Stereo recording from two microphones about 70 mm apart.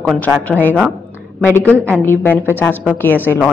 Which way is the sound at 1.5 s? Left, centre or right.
Right.